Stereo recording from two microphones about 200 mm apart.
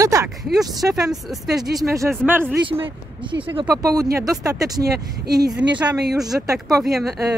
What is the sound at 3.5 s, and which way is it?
Speech, 20° right (ahead or behind).